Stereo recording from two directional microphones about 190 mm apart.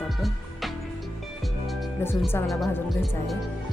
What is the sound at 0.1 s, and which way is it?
Music, centre (ahead or behind).